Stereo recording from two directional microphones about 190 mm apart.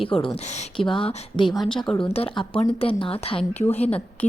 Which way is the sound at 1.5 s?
Centre (ahead or behind).